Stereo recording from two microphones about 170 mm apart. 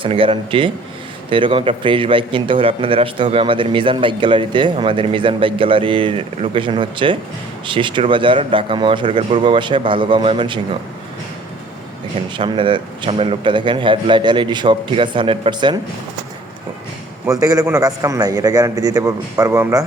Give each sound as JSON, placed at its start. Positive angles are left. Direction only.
{"t": 0.0, "sound": "a man's voice", "side_deg": -30}
{"t": 12.1, "sound": "a man's voice", "side_deg": -30}
{"t": 17.2, "sound": "a man's voice", "side_deg": -20}